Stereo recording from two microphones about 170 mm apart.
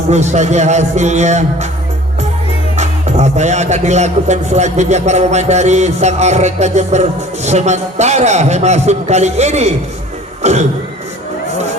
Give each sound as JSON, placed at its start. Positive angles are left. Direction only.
{"t": 0.1, "sound": "speech", "side_deg": -40}
{"t": 2.7, "sound": "speech", "side_deg": -40}